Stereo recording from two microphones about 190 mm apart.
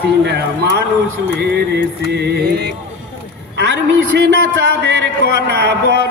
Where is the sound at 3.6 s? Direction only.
65° right (ahead or behind).